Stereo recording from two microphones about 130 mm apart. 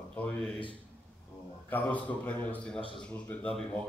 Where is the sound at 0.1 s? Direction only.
10° left (ahead or behind).